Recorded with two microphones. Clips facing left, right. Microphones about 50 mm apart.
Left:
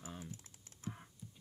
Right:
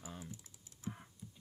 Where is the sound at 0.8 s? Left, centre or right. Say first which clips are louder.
Right 1 dB; left.